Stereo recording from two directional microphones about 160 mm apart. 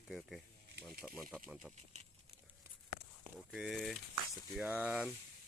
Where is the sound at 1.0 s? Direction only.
5° right (ahead or behind).